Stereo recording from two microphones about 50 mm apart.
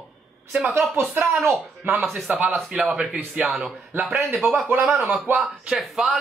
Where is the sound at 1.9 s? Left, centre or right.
Right.